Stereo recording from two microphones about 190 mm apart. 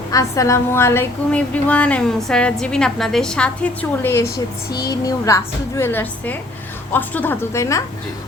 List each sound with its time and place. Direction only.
0.1 s a woman's voice: 15° left (ahead or behind)